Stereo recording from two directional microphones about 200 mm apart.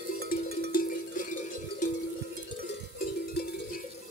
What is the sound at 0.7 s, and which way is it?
Cowbell, 45° left (ahead or behind).